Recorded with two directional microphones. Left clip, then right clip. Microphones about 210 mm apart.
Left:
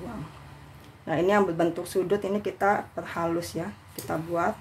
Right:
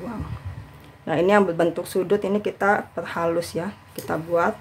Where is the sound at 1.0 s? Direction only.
15° right (ahead or behind).